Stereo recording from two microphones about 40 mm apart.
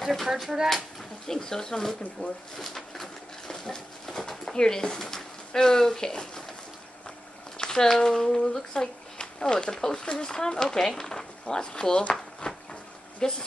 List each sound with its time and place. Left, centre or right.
0.0 s speech: centre
0.3 s speech: centre
1.2 s speech: centre
2.2 s speech: left
2.5 s bird: centre
4.6 s speech: centre
7.5 s a sound: centre
7.9 s speech: centre
12.1 s a sound: left
13.2 s speech: centre